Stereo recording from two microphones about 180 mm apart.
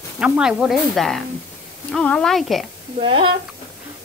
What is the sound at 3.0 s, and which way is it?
Speech, 30° right (ahead or behind).